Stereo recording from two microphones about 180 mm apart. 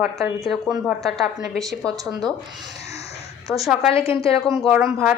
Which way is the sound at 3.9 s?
30° left (ahead or behind).